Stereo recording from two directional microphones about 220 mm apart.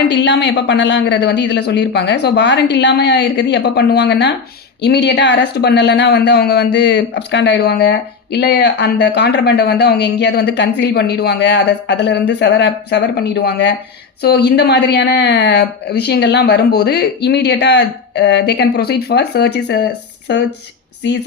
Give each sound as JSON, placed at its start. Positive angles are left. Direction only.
{"t": 0.1, "sound": "speech", "side_deg": 55}